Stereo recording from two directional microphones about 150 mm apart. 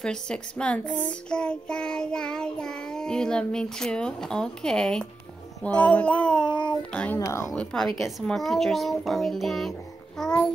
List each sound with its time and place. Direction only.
0.0 s a child's voice: 5° left (ahead or behind)
7.2 s speech: 20° left (ahead or behind)
7.5 s a child's voice: 5° left (ahead or behind)